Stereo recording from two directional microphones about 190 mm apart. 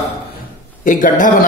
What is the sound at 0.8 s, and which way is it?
Speech, 45° left (ahead or behind).